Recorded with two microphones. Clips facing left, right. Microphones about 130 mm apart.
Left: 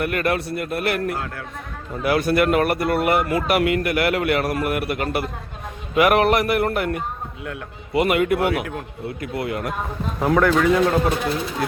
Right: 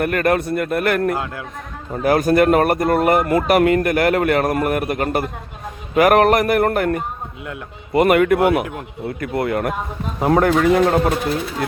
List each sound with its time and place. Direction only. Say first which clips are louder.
0.0 s speech: right 4 dB; 45° right (ahead or behind)
10.3 s a man's voice: right 2 dB; 40° right (ahead or behind)